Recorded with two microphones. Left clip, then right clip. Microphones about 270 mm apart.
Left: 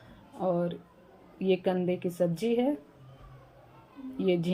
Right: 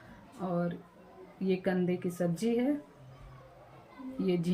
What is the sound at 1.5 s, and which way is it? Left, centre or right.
Speech, centre.